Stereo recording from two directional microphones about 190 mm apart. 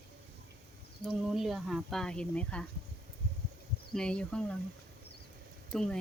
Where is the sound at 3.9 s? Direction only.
5° left (ahead or behind).